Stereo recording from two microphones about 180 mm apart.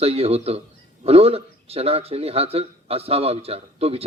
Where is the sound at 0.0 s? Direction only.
35° right (ahead or behind).